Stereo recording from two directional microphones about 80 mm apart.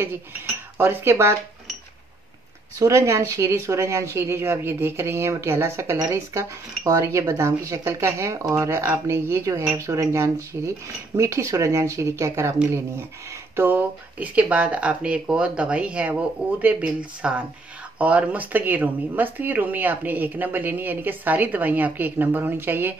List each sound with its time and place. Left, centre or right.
0.7 s speech: right
2.8 s speech: right
13.6 s speech: right